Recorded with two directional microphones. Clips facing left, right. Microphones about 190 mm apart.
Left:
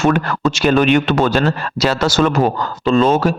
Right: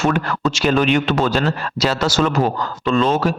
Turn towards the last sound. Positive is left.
turn(degrees=45)  # may be behind; listen again after turning